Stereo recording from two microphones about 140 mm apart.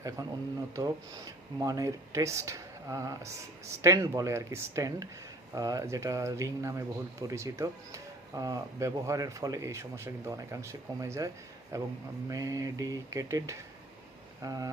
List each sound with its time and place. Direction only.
0.2 s speech: 25° right (ahead or behind)